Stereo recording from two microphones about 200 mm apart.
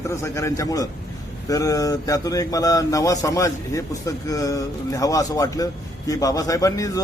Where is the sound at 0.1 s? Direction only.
15° left (ahead or behind).